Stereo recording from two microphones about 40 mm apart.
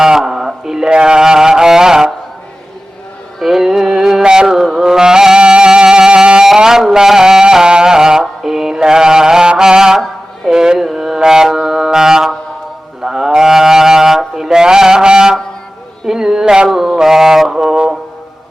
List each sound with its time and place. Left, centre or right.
0.0 s music: centre
3.4 s music: centre
4.5 s music: centre; by 6.4 s right
6.4 s mantra: centre
11.5 s a sound: centre
13.0 s livestock: centre
16.0 s a sound: centre
16.7 s mantra: centre